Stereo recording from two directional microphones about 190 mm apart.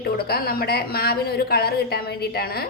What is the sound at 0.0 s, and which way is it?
A woman's voice, 55° left (ahead or behind).